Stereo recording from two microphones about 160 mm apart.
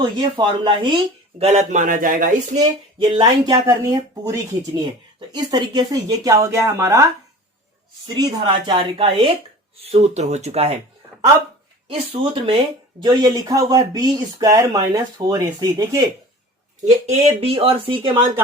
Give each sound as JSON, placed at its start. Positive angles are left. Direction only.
{"t": 0.0, "sound": "speech", "side_deg": -25}
{"t": 1.4, "sound": "a man's voice", "side_deg": -45}
{"t": 3.0, "sound": "speech", "side_deg": -30}
{"t": 8.0, "sound": "speech", "side_deg": -30}
{"t": 11.9, "sound": "speech", "side_deg": -35}
{"t": 13.0, "sound": "speech", "side_deg": -25}
{"t": 16.8, "sound": "speech", "side_deg": -45}